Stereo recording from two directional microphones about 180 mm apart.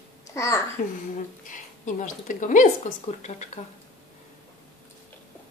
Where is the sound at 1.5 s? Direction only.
45° left (ahead or behind).